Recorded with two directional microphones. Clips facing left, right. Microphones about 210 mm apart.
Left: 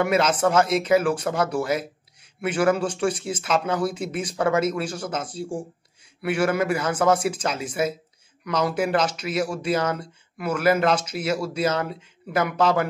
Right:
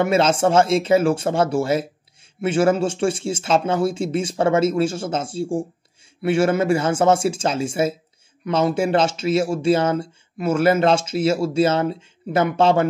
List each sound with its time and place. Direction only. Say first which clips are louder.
0.0 s speech: right 3 dB; 25° right (ahead or behind)